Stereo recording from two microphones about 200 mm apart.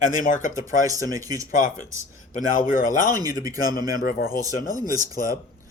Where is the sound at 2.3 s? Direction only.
40° left (ahead or behind).